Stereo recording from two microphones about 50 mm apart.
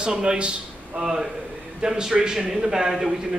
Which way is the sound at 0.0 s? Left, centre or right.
Centre.